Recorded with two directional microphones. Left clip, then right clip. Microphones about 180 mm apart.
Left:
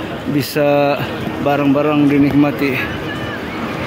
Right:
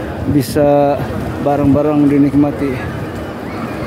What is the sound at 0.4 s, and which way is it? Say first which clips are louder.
Speech: right 3 dB; 25° right (ahead or behind).